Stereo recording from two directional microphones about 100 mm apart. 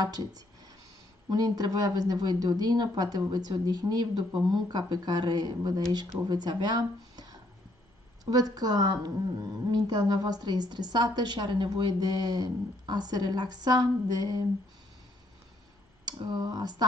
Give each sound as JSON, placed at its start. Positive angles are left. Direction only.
{"t": 0.0, "sound": "a woman's voice", "side_deg": -40}
{"t": 8.3, "sound": "a woman's voice", "side_deg": -40}
{"t": 16.1, "sound": "a woman's voice", "side_deg": -45}